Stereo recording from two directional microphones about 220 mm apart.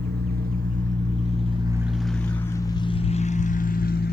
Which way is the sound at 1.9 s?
Centre (ahead or behind).